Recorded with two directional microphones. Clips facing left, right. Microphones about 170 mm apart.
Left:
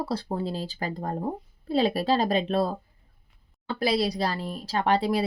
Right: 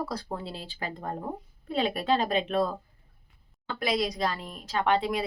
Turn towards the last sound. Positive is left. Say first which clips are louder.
# left 2 dB
turn(degrees=35)  # may be behind; listen again after turning